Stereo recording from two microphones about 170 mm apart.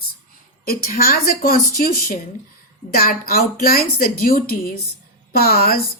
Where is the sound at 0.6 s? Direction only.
60° left (ahead or behind).